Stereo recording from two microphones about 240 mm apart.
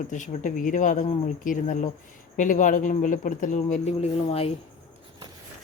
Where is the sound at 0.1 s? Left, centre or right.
Left.